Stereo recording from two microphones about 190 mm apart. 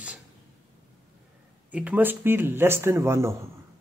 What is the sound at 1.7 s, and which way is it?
A man's voice, 10° right (ahead or behind).